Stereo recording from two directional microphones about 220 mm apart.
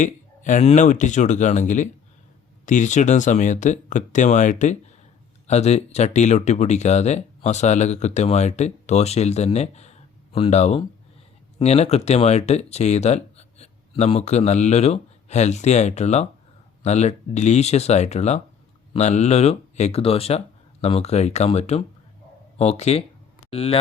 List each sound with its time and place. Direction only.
0.0 s speech: 35° left (ahead or behind)